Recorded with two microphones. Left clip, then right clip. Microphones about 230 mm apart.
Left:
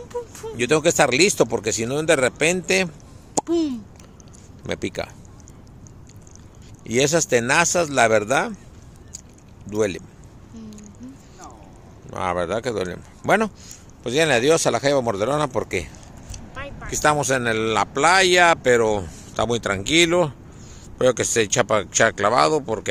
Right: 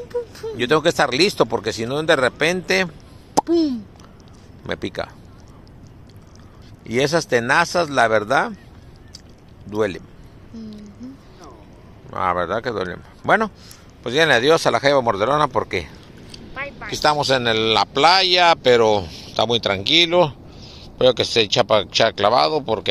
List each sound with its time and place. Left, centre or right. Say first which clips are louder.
0.1 s speech: right 4 dB; right
0.6 s speech: right 1 dB; centre
3.4 s a child's voice: right 2 dB; right
4.6 s speech: right 1 dB; centre
6.8 s speech: even; centre
9.7 s speech: right 1 dB; centre
12.1 s speech: right 3 dB; centre
16.5 s a sound: right 3 dB; centre
17.2 s speech: right 3 dB; centre